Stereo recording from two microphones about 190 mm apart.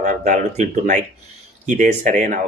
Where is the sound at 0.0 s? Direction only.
40° right (ahead or behind).